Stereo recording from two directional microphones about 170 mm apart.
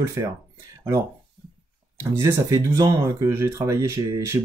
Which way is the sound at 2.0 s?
15° right (ahead or behind).